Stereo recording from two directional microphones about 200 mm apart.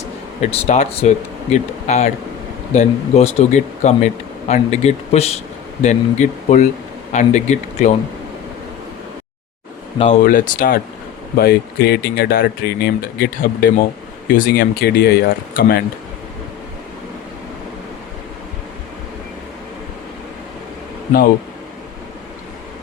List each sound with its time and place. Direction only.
0.5 s speech: 30° left (ahead or behind)
10.2 s speech: 45° left (ahead or behind)